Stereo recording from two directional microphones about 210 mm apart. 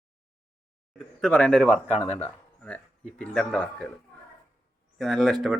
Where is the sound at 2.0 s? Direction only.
30° left (ahead or behind).